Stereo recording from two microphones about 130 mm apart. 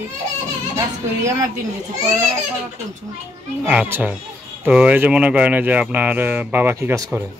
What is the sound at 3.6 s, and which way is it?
Speech, 10° right (ahead or behind).